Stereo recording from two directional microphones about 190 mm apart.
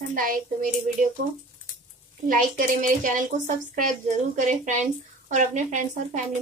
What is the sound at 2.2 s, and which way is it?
Speech, 45° right (ahead or behind).